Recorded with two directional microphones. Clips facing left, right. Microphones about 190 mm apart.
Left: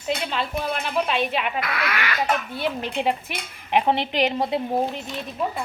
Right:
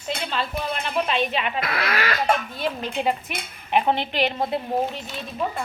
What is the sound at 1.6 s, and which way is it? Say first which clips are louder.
Speech: right 2 dB; 30° right (ahead or behind).